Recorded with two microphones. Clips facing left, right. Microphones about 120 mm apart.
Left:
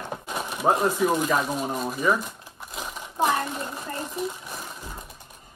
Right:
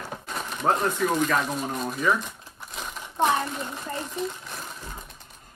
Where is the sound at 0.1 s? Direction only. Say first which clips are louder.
Left 4 dB; 10° left (ahead or behind).